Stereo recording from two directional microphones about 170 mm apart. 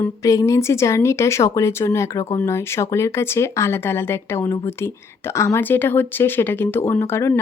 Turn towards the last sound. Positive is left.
turn(degrees=15)  # may be behind; listen again after turning